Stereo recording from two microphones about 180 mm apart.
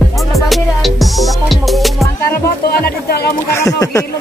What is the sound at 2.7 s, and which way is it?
Speech, 60° left (ahead or behind).